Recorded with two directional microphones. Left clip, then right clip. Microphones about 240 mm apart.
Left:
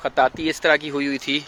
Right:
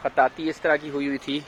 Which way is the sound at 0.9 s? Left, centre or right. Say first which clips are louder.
Left 3 dB; left.